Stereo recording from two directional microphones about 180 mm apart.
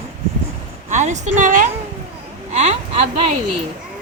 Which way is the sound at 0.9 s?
40° right (ahead or behind).